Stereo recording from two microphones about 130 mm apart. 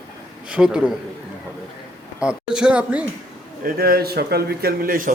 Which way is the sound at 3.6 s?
90° right.